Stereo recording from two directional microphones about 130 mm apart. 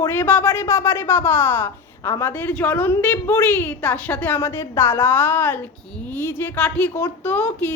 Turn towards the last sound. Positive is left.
turn(degrees=15)  # may be behind; listen again after turning